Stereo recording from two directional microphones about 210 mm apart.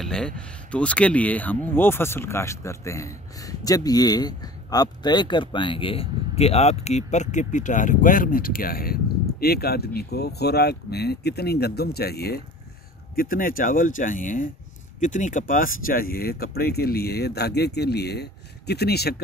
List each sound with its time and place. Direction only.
0.0 s speech: 5° left (ahead or behind); by 19.2 s 50° left (ahead or behind)